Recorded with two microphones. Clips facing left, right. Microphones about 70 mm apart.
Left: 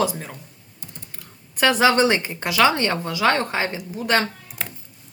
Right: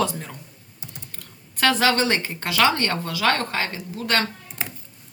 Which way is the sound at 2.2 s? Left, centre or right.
Centre.